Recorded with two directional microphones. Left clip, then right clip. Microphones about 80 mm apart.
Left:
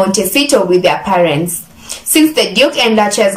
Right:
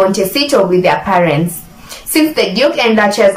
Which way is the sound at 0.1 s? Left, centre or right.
Left.